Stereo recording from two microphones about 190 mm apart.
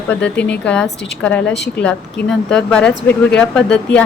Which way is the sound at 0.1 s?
5° left (ahead or behind).